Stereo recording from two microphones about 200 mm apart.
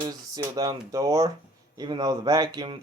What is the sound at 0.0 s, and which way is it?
Speech, 20° right (ahead or behind).